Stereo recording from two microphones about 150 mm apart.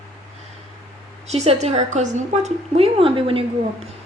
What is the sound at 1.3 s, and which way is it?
A woman's voice, 45° right (ahead or behind).